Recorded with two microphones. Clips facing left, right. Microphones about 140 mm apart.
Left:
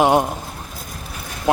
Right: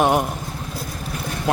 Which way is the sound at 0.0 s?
25° left (ahead or behind).